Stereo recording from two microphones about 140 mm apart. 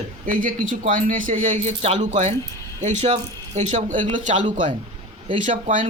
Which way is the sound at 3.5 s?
60° right (ahead or behind).